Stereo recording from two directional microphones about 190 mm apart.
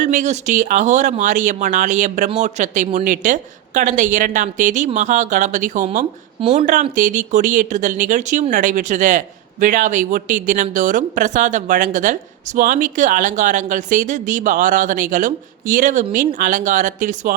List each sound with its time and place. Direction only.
0.0 s speech: 40° right (ahead or behind)